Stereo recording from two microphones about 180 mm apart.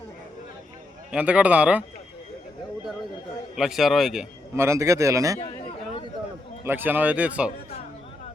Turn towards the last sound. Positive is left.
turn(degrees=-5)  # may be behind; listen again after turning